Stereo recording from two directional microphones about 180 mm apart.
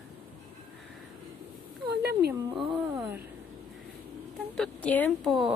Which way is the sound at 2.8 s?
10° right (ahead or behind).